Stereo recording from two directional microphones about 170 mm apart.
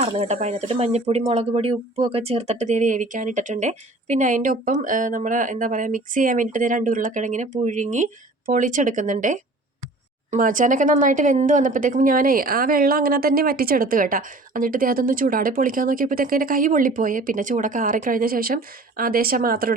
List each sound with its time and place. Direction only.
0.0 s speech: 40° right (ahead or behind); by 19.7 s 60° right (ahead or behind)